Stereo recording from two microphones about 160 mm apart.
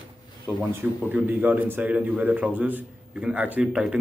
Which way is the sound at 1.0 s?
10° right (ahead or behind).